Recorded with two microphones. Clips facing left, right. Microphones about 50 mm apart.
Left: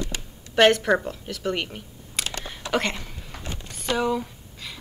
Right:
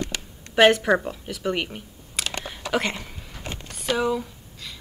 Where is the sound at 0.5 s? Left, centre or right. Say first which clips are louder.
Right 1 dB; centre.